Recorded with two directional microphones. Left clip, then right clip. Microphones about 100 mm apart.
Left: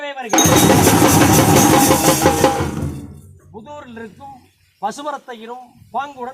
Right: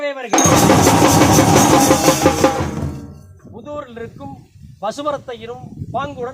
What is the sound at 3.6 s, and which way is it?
A man's voice, 35° right (ahead or behind).